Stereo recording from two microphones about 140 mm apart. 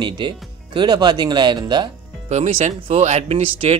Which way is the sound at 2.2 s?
50° right (ahead or behind).